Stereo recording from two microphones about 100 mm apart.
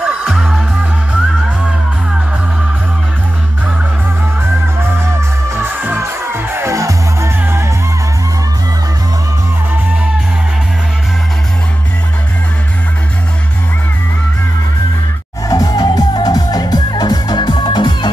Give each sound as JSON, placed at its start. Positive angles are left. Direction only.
{"t": 0.0, "sound": "music", "side_deg": -10}
{"t": 5.5, "sound": "music", "side_deg": -25}
{"t": 15.4, "sound": "music", "side_deg": 35}